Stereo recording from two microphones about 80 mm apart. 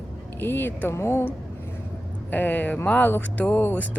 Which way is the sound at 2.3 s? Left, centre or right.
Left.